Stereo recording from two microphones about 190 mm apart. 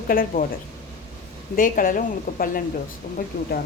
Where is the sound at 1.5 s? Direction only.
45° left (ahead or behind).